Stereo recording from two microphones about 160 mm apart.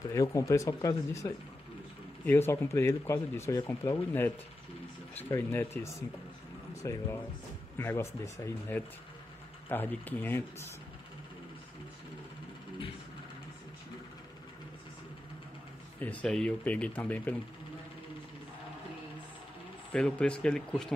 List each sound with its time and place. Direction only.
0.1 s speech: 20° left (ahead or behind)
16.0 s speech: 10° left (ahead or behind)
19.9 s speech: 5° left (ahead or behind)